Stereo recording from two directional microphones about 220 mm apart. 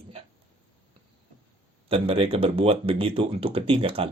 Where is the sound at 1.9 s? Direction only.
25° right (ahead or behind).